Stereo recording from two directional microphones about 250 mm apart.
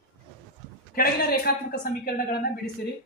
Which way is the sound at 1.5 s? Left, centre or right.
Left.